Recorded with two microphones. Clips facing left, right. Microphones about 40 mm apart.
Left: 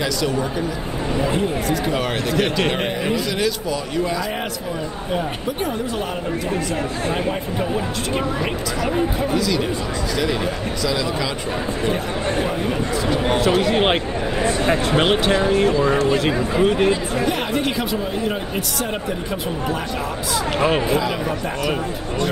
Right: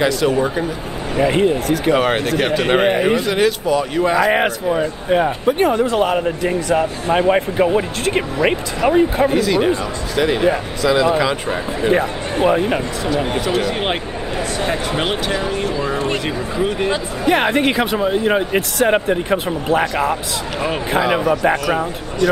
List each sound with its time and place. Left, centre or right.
0.3 s speech: right
6.7 s speech: right
7.3 s speech: right
12.4 s speech: right
13.6 s speech: centre
17.3 s speech: right
17.9 s speech: right